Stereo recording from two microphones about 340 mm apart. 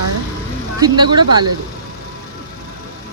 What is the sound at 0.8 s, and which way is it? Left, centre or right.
Speech, centre.